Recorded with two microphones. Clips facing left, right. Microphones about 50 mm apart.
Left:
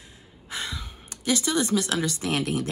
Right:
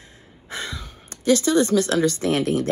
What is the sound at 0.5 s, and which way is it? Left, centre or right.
Gasp, right.